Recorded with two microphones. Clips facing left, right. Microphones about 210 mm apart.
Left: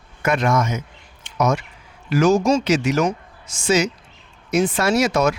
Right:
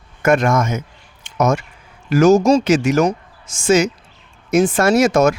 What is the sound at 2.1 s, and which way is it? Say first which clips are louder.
Speech: right 5 dB; 45° right (ahead or behind).